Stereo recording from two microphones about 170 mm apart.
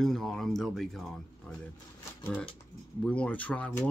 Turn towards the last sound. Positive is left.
turn(degrees=10)  # may be behind; listen again after turning